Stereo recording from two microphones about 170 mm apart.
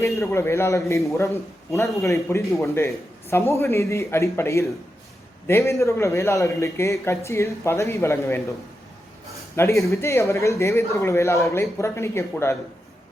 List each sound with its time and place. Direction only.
0.2 s speech: 15° left (ahead or behind)
9.6 s speech: 15° left (ahead or behind)